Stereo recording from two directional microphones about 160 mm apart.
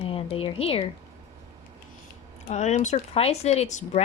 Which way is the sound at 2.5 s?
45° left (ahead or behind).